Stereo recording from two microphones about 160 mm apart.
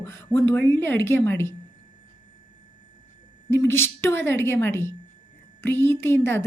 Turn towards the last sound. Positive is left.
turn(degrees=15)  # may be behind; listen again after turning